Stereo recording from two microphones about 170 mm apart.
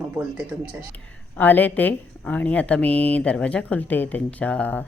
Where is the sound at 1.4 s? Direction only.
10° left (ahead or behind).